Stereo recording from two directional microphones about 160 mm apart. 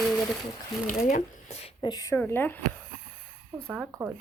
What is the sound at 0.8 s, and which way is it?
Speech, 55° left (ahead or behind).